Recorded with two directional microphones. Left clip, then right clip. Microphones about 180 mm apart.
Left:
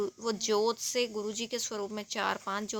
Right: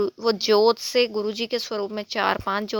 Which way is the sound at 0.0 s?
35° right (ahead or behind).